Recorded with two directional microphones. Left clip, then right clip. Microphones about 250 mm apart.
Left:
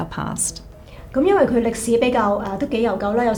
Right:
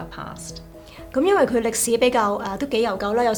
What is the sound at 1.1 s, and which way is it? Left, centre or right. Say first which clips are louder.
A woman's voice: left 2 dB; right.